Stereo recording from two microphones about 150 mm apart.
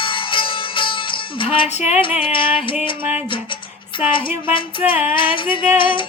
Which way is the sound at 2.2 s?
35° left (ahead or behind).